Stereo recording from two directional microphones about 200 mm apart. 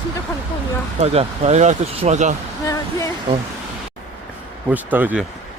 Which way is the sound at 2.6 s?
15° left (ahead or behind).